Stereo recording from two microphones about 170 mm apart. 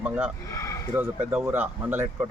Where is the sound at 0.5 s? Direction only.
15° left (ahead or behind).